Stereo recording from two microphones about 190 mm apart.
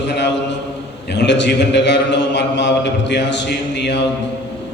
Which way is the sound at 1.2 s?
65° left (ahead or behind).